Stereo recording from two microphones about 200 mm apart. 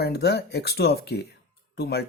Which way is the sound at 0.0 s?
55° left (ahead or behind).